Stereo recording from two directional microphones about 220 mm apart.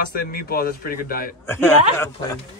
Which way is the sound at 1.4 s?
10° left (ahead or behind).